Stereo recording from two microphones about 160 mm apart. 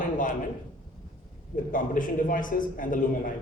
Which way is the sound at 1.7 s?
55° left (ahead or behind).